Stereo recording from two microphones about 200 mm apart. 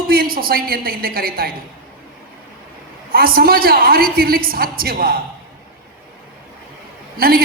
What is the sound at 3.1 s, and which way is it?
A woman's voice, 50° right (ahead or behind).